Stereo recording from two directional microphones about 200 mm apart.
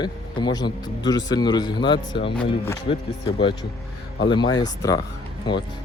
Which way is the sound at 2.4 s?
10° left (ahead or behind).